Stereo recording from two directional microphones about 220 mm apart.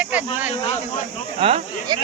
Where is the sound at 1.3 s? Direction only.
25° right (ahead or behind).